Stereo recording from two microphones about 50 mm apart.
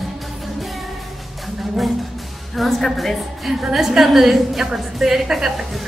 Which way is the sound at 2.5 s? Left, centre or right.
Centre.